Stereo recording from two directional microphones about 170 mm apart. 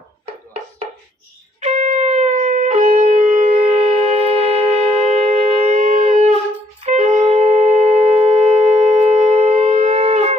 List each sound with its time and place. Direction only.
1.6 s shofar: 45° right (ahead or behind)